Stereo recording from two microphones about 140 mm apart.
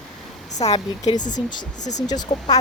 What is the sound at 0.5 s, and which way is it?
Speech, 50° left (ahead or behind).